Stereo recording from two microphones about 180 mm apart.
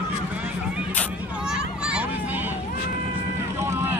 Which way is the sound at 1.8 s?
5° right (ahead or behind).